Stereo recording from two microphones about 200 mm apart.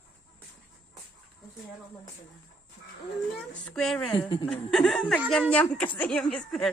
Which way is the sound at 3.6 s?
5° left (ahead or behind).